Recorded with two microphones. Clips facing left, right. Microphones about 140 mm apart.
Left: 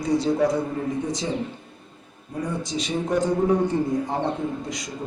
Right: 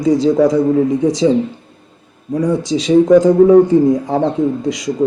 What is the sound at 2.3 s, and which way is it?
A man's voice, 90° right.